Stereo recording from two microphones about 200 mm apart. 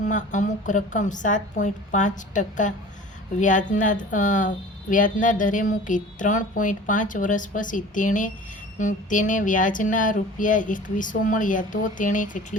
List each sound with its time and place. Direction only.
0.0 s speech: 40° left (ahead or behind)